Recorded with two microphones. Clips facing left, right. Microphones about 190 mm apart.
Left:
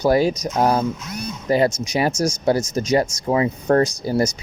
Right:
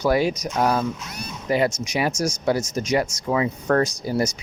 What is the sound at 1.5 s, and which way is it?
Speech, 35° left (ahead or behind).